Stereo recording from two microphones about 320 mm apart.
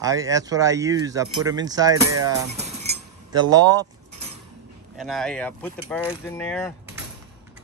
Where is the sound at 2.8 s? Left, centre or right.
Centre.